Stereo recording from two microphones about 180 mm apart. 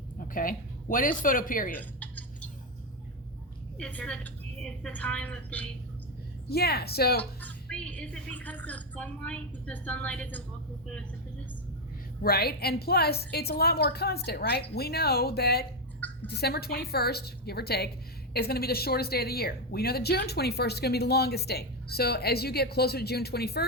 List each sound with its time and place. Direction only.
0.2 s speech: 50° left (ahead or behind)
1.7 s a sound: 10° left (ahead or behind)
3.8 s a woman's voice: 5° left (ahead or behind)
6.5 s speech: 60° left (ahead or behind)
7.2 s a woman's voice: 5° left (ahead or behind)
12.2 s speech: 60° left (ahead or behind)